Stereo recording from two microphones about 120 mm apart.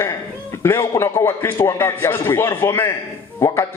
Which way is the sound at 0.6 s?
20° left (ahead or behind).